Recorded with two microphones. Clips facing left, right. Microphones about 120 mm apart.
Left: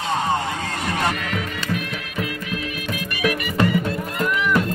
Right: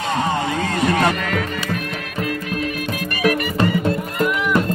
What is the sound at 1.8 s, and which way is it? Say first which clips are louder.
Music: right 2 dB; 45° right (ahead or behind).